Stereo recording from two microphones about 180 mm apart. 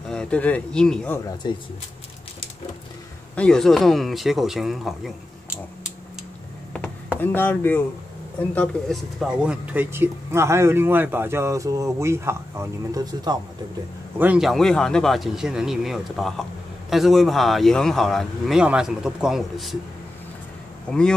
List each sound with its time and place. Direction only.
0.1 s speech: 5° left (ahead or behind)
1.4 s speech: 25° left (ahead or behind)
3.3 s speech: 5° left (ahead or behind)
7.2 s speech: 10° left (ahead or behind); by 13.4 s 20° right (ahead or behind)
14.1 s speech: 10° right (ahead or behind)